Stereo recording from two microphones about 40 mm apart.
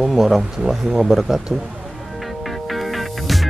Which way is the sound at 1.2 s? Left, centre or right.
Centre.